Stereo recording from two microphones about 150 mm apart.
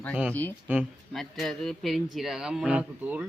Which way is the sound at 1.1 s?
Centre (ahead or behind).